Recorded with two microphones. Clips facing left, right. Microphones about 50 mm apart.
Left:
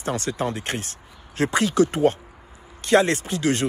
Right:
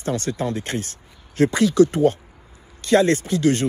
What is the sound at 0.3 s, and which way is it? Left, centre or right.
Speech, left.